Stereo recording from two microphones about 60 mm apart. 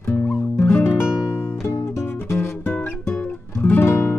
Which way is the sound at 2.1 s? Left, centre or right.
Left.